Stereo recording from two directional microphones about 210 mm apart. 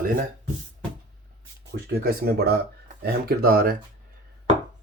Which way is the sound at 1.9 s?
45° right (ahead or behind).